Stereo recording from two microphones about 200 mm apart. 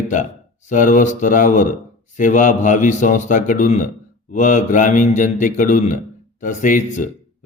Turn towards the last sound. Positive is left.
turn(degrees=40)  # may be behind; listen again after turning